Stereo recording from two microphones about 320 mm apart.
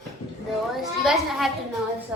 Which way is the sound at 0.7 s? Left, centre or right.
Centre.